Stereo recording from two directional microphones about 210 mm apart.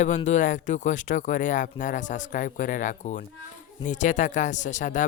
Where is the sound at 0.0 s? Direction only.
35° left (ahead or behind).